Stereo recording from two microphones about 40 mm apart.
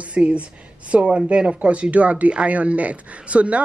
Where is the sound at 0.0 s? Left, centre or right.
Right.